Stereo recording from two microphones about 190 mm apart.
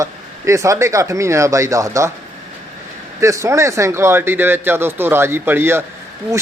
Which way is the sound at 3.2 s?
15° right (ahead or behind).